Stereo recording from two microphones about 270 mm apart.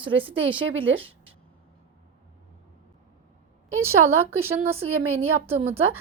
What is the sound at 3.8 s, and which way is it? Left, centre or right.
Speech, right.